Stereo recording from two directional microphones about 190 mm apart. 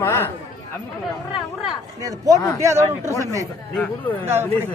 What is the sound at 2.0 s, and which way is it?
Speech, 20° right (ahead or behind).